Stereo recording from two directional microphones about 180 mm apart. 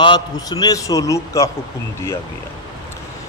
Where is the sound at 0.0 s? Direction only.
25° left (ahead or behind).